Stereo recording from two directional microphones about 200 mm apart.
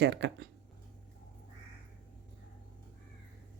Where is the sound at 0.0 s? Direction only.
60° right (ahead or behind).